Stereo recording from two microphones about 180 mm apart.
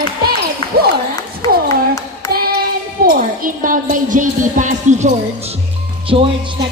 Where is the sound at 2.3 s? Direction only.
60° right (ahead or behind).